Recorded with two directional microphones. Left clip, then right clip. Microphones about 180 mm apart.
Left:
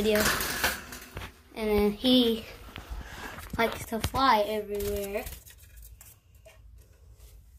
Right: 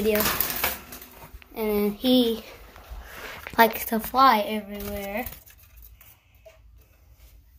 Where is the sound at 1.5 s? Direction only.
25° right (ahead or behind).